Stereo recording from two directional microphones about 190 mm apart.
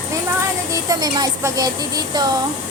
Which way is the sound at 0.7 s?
20° right (ahead or behind).